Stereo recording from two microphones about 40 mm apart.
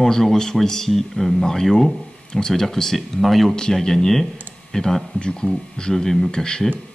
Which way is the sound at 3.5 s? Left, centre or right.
Centre.